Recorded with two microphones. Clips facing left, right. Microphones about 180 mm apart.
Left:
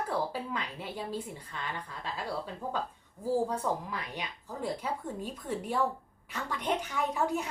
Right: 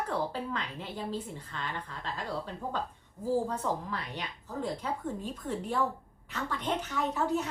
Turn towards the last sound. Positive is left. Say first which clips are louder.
# right 1 dB
turn(degrees=10)  # may be behind; listen again after turning